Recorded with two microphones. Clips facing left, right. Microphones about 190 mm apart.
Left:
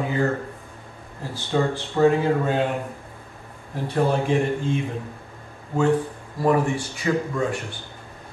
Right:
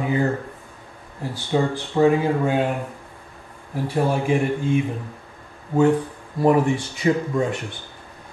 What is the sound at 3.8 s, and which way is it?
Speech, 10° right (ahead or behind).